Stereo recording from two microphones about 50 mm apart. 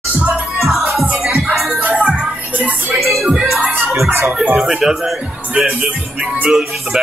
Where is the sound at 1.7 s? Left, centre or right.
Right.